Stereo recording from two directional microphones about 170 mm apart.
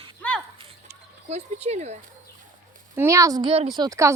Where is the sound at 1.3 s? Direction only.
40° right (ahead or behind).